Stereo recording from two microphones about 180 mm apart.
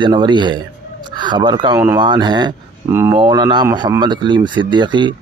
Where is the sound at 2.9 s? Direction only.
15° right (ahead or behind).